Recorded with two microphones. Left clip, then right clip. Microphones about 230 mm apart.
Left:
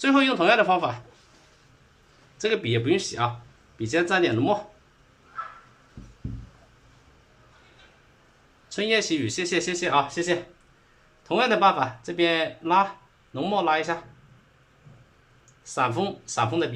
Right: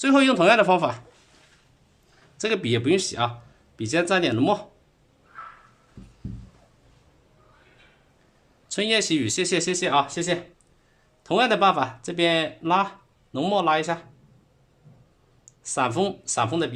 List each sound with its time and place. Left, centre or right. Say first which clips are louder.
0.0 s speech: right 2 dB; right
2.4 s speech: right 1 dB; right
8.7 s speech: right 1 dB; right
15.6 s speech: right 1 dB; right